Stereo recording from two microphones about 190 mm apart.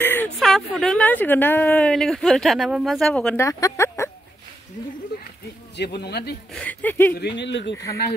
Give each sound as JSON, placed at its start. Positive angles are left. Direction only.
{"t": 0.0, "sound": "speech", "side_deg": 10}
{"t": 3.4, "sound": "speech", "side_deg": 15}
{"t": 5.8, "sound": "speech", "side_deg": 60}
{"t": 6.5, "sound": "speech", "side_deg": 10}
{"t": 7.2, "sound": "speech", "side_deg": 65}